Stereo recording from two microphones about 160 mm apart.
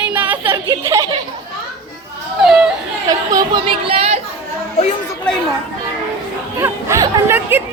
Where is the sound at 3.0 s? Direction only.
25° right (ahead or behind).